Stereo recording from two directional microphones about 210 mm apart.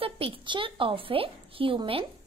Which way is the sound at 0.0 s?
25° right (ahead or behind).